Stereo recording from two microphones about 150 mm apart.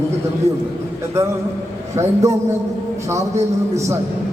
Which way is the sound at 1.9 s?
20° right (ahead or behind).